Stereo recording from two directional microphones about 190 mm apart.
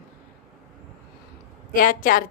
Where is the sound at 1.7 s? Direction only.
45° left (ahead or behind).